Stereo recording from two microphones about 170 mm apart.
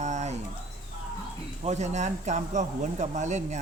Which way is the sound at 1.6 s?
40° right (ahead or behind).